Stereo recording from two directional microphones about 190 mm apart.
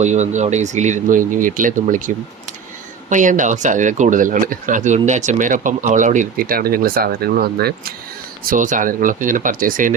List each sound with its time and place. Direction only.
0.0 s speech: 40° right (ahead or behind); by 7.9 s 55° right (ahead or behind)
8.4 s speech: 40° right (ahead or behind)